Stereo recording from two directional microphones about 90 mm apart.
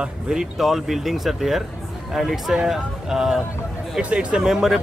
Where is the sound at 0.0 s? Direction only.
5° right (ahead or behind).